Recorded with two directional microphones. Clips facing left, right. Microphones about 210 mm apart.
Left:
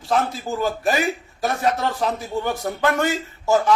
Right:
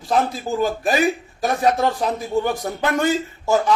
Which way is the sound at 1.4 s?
15° right (ahead or behind).